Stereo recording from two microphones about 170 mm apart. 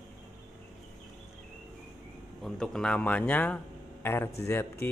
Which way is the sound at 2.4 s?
5° left (ahead or behind).